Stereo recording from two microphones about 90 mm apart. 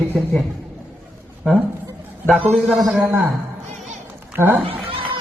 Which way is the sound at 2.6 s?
Centre (ahead or behind).